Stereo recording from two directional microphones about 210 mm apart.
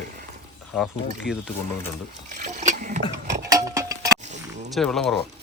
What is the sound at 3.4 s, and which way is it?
Tick-tock, 15° right (ahead or behind).